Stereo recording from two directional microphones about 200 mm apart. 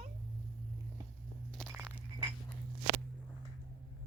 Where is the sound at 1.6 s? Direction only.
Centre (ahead or behind).